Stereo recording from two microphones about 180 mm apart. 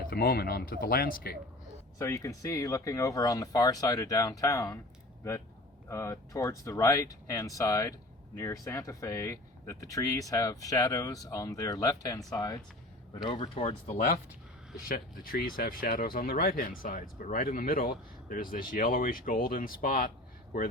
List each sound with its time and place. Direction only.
0.0 s speech: 55° left (ahead or behind)
2.0 s speech: 15° left (ahead or behind)
5.9 s speech: 15° left (ahead or behind)
13.2 s speech: 30° left (ahead or behind)
14.8 s speech: 55° left (ahead or behind)